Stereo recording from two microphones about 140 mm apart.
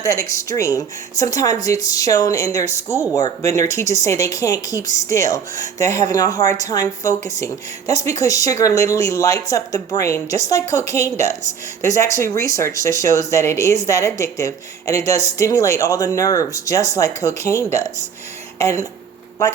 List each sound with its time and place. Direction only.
0.0 s speech: 20° left (ahead or behind)